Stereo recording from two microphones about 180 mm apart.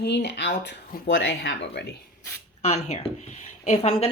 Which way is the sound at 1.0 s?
90° left.